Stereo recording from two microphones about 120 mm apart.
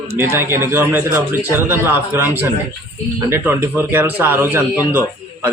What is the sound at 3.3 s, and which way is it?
A man's voice, 20° right (ahead or behind).